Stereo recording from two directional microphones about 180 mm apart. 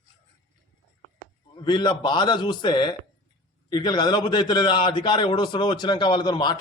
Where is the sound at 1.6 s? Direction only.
25° left (ahead or behind).